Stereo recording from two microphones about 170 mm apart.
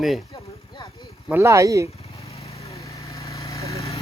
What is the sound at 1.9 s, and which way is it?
Vehicle, 35° left (ahead or behind).